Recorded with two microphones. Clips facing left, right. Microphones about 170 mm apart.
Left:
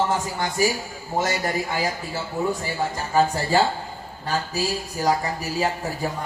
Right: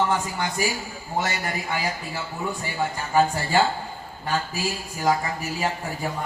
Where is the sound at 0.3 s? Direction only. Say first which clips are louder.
Left 3 dB; 40° left (ahead or behind).